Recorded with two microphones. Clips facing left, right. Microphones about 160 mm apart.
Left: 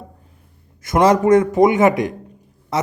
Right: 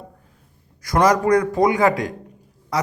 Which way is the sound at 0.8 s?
25° left (ahead or behind).